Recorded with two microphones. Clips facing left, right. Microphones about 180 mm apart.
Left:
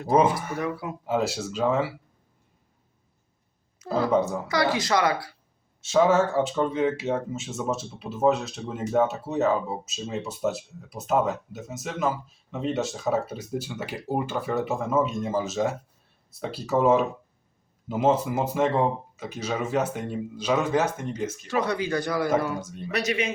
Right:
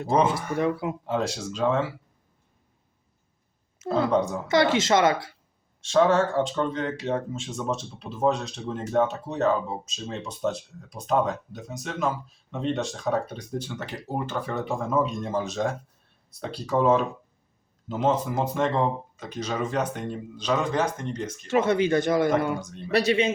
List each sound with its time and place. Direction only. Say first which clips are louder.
0.6 s speech: right 8 dB; 20° right (ahead or behind)
1.0 s speech: left 4 dB; 5° left (ahead or behind)
3.8 s speech: even; 5° left (ahead or behind)
4.4 s speech: right 3 dB; 25° right (ahead or behind)
5.8 s speech: even; 5° left (ahead or behind)
21.5 s speech: right 5 dB; 25° right (ahead or behind)